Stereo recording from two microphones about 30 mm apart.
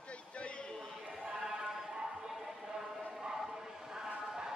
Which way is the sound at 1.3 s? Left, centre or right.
Right.